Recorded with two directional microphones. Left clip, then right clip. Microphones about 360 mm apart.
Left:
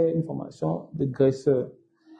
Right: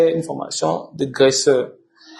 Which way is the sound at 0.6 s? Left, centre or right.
Centre.